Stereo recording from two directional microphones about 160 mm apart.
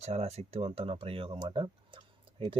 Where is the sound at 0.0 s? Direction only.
40° right (ahead or behind).